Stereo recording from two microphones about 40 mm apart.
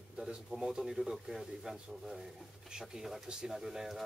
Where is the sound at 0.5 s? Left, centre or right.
Centre.